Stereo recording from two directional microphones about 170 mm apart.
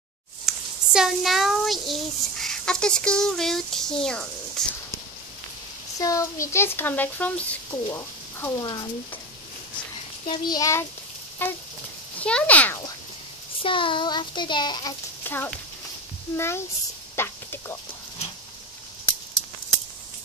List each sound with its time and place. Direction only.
0.5 s a child's voice: 5° right (ahead or behind)
5.9 s speech: 20° left (ahead or behind)
10.2 s child singing: 25° left (ahead or behind)
11.4 s speech: 10° left (ahead or behind)
13.6 s child singing: 30° left (ahead or behind)
15.2 s speech: 10° left (ahead or behind)
17.1 s a sound: 15° left (ahead or behind)